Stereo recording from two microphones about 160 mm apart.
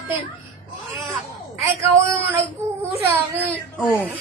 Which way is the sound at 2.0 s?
20° right (ahead or behind).